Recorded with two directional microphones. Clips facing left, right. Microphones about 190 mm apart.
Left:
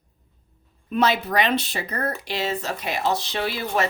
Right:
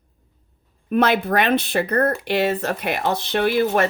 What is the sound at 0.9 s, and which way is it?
Speech, 55° right (ahead or behind).